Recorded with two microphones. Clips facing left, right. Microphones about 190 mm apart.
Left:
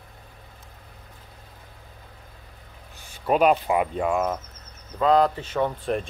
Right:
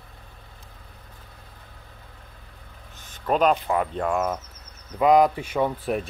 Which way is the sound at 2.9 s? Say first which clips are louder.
Left 1 dB; 10° left (ahead or behind).